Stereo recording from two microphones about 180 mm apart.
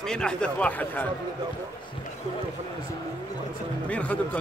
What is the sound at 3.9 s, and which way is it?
Speech, 5° left (ahead or behind).